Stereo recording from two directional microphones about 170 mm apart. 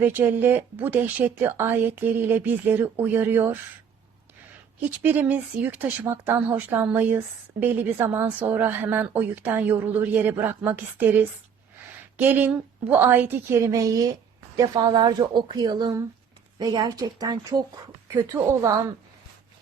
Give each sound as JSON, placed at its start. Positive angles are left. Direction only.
{"t": 0.0, "sound": "speech", "side_deg": -10}
{"t": 4.9, "sound": "speech", "side_deg": -10}